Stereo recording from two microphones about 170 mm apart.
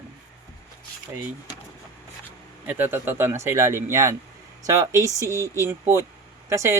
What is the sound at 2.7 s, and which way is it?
Speech, 10° right (ahead or behind).